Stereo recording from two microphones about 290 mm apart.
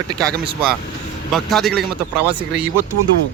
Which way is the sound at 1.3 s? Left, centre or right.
Centre.